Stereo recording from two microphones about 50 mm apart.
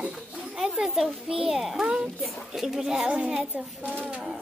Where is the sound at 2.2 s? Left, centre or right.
Centre.